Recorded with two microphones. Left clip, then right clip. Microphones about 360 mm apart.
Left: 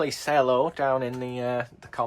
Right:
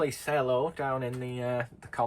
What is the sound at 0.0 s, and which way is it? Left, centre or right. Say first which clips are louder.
Speech: left 6 dB; centre.